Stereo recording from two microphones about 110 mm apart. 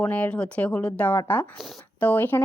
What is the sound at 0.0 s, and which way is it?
Speech, 10° left (ahead or behind).